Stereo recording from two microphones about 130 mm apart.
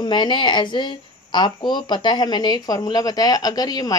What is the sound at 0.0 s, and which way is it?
Speech, 35° left (ahead or behind).